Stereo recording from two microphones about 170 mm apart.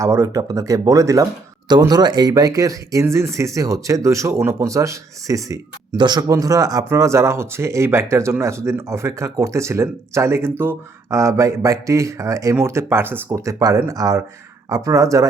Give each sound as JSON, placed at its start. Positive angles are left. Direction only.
{"t": 0.0, "sound": "speech", "side_deg": -15}